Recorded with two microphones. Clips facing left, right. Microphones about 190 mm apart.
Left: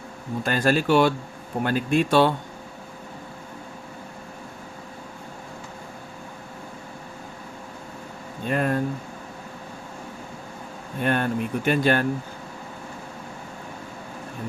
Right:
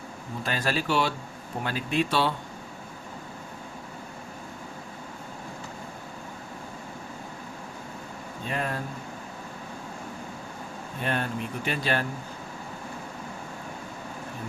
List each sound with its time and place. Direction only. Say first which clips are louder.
0.4 s speech: left 7 dB; 50° left (ahead or behind)
8.4 s speech: left 8 dB; 50° left (ahead or behind)
11.0 s speech: left 6 dB; 55° left (ahead or behind)